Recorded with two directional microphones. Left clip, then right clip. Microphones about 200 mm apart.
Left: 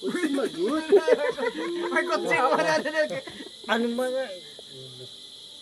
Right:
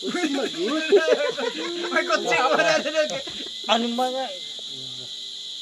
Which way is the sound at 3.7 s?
50° left (ahead or behind).